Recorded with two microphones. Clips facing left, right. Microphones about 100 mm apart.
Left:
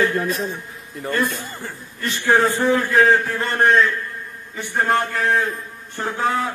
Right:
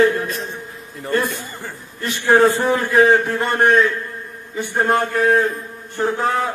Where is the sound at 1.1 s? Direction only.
15° right (ahead or behind).